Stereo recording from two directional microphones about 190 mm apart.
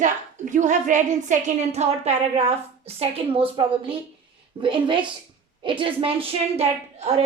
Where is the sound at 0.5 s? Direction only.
40° right (ahead or behind).